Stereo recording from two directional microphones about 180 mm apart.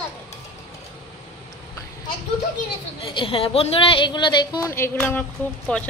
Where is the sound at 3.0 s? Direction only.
30° left (ahead or behind).